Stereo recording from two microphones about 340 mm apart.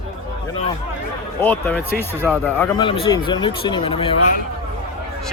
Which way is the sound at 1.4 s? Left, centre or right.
Centre.